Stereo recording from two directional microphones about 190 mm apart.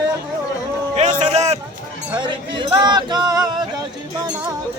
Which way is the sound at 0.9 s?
35° right (ahead or behind).